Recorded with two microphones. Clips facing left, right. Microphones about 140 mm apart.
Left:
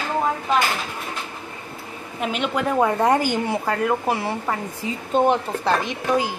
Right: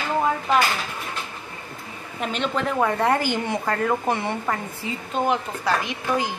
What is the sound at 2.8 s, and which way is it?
A woman's voice, 15° left (ahead or behind).